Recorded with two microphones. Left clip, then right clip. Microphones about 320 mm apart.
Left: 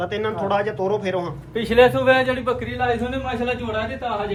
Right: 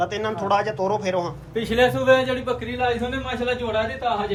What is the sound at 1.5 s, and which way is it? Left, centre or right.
A man's voice, centre.